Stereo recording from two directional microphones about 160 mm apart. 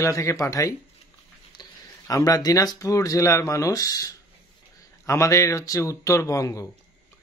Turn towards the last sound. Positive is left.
turn(degrees=20)  # may be behind; listen again after turning